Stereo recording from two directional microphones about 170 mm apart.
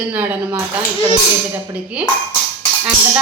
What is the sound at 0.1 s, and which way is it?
Speech, 10° right (ahead or behind).